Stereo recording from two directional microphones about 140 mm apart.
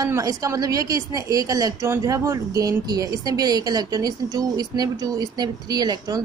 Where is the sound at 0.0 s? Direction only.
25° right (ahead or behind).